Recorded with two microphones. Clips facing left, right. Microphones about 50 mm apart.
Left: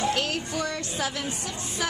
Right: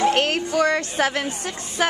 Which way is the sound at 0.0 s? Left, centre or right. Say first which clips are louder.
Right 7 dB; right.